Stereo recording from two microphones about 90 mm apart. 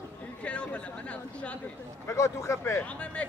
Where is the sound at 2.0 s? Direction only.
35° left (ahead or behind).